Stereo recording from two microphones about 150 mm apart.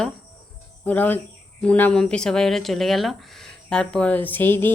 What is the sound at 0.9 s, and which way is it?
Speech, 10° left (ahead or behind).